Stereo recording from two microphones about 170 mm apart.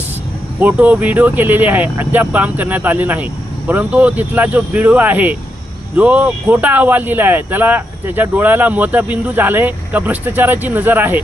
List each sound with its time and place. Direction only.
0.6 s speech: 10° right (ahead or behind)